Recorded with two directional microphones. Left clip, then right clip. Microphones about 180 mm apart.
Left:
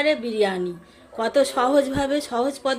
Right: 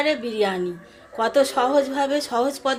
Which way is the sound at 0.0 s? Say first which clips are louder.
Left 1 dB; 15° left (ahead or behind).